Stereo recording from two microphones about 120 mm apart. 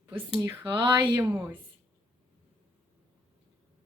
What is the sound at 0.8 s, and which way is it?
Speech, 40° right (ahead or behind).